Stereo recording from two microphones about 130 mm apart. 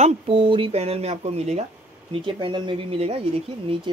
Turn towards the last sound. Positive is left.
turn(degrees=-45)  # may be behind; listen again after turning